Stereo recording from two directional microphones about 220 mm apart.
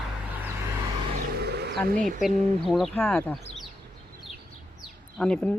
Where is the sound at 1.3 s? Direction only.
45° right (ahead or behind).